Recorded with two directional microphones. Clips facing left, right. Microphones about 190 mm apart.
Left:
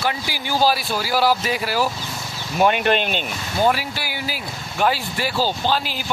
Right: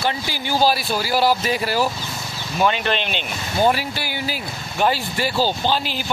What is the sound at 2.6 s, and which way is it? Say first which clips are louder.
Speech: left 3 dB; 50° left (ahead or behind).